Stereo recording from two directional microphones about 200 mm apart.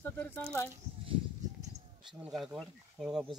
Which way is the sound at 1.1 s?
20° right (ahead or behind).